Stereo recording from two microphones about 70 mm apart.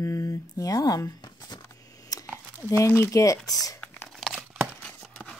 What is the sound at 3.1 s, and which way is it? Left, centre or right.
Speech, left.